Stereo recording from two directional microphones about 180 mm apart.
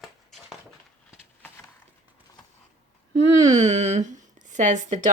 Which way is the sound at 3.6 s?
40° right (ahead or behind).